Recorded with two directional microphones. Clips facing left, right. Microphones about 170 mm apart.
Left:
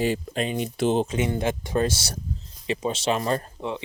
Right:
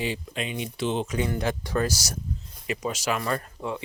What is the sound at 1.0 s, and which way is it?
Speech, 20° left (ahead or behind).